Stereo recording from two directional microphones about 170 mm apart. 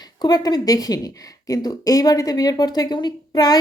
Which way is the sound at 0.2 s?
25° left (ahead or behind).